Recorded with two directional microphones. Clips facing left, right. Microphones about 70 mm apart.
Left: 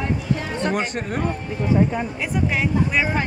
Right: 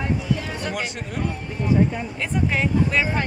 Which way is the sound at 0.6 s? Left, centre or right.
Left.